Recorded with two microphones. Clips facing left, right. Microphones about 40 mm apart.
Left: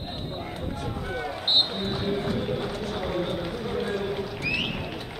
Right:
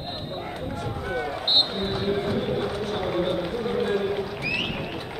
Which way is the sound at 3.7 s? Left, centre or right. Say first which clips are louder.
Right 4 dB; centre.